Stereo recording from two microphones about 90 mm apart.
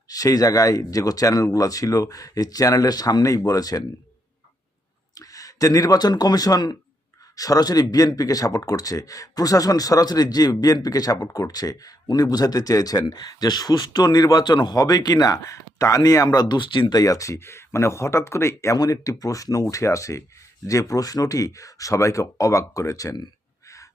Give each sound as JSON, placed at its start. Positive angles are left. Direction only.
{"t": 0.1, "sound": "speech", "side_deg": 40}
{"t": 5.1, "sound": "speech", "side_deg": 40}
{"t": 16.9, "sound": "speech", "side_deg": 40}